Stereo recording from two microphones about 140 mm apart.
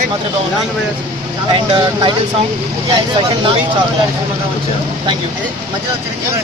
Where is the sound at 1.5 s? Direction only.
35° right (ahead or behind).